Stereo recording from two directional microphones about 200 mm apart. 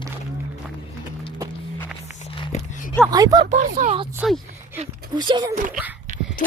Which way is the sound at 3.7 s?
35° right (ahead or behind).